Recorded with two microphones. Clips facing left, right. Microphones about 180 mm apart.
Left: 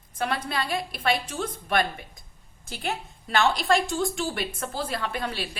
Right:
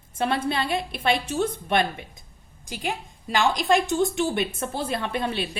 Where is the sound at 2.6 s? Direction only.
15° right (ahead or behind).